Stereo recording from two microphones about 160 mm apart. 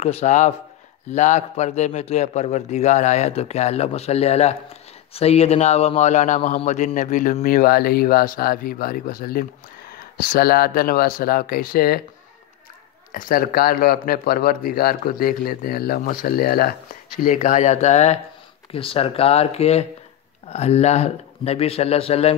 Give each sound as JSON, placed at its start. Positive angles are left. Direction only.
{"t": 0.0, "sound": "a man's voice", "side_deg": 40}
{"t": 13.1, "sound": "speech", "side_deg": 60}
{"t": 17.2, "sound": "a man's voice", "side_deg": 50}